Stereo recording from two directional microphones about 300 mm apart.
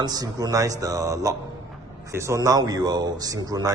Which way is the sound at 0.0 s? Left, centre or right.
Centre.